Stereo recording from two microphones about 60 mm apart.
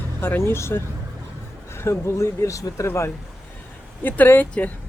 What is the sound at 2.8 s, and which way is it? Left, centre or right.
Speech, left.